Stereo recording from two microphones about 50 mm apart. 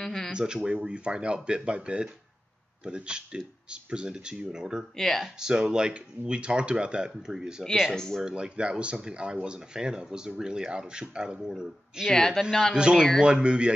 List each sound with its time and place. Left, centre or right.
0.0 s a sound: centre
0.3 s speech: centre
4.9 s speech: centre
5.2 s speech: centre
7.9 s speech: centre
8.2 s speech: centre
12.1 s speech: centre
12.4 s speech: centre
12.7 s speech: centre